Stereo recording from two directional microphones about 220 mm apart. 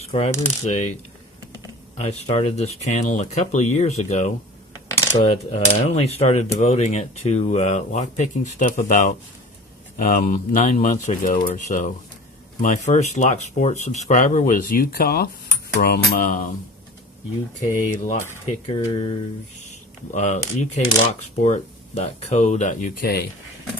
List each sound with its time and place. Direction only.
0.1 s speech: 25° left (ahead or behind)
2.0 s speech: 30° left (ahead or behind)
17.7 s speech: 35° left (ahead or behind)
18.7 s speech: 25° left (ahead or behind)
20.1 s speech: 30° left (ahead or behind)